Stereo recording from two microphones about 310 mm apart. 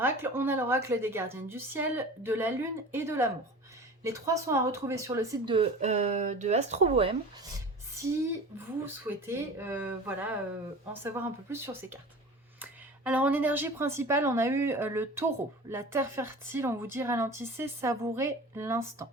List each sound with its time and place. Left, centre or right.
0.0 s speech: centre